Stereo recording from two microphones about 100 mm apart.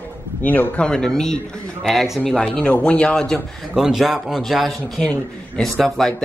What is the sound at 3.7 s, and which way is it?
A man's voice, 5° right (ahead or behind).